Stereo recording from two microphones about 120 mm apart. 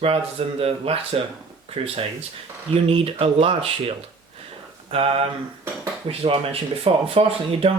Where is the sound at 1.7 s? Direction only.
55° right (ahead or behind).